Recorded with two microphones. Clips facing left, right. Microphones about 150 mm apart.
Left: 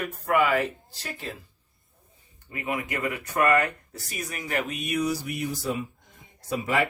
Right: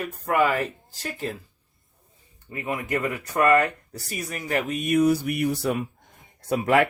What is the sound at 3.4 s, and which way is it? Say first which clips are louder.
Speech: right 3 dB; 35° right (ahead or behind).